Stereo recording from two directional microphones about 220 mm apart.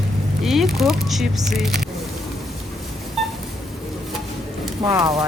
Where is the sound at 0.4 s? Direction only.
Centre (ahead or behind).